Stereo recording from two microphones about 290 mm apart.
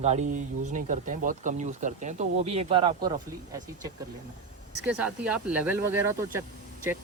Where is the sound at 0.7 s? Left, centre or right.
Right.